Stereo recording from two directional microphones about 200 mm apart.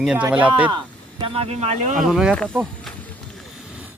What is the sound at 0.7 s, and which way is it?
Speech, 25° right (ahead or behind).